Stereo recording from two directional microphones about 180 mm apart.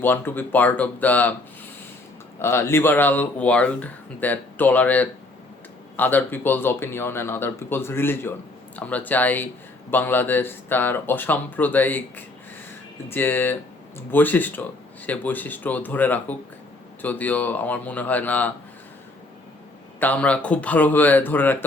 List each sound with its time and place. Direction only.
0.0 s speech: 10° left (ahead or behind)
2.4 s speech: 15° left (ahead or behind)
20.0 s speech: 10° left (ahead or behind)